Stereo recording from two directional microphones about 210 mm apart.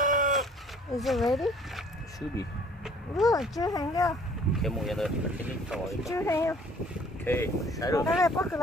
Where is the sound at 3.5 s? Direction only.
15° left (ahead or behind).